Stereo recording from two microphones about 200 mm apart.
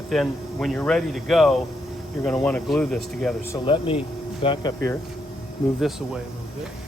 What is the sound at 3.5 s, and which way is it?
Speech, 25° left (ahead or behind).